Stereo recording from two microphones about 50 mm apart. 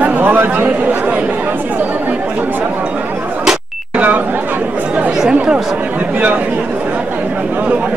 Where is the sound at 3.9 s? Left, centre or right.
Right.